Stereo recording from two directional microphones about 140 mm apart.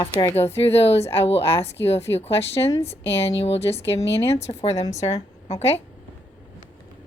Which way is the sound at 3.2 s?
45° left (ahead or behind).